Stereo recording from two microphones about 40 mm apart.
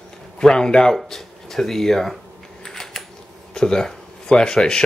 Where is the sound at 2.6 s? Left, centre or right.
Centre.